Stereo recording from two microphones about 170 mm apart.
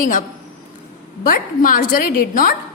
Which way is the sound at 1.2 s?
55° left (ahead or behind).